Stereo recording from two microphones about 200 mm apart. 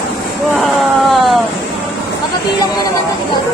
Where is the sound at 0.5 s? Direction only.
Centre (ahead or behind).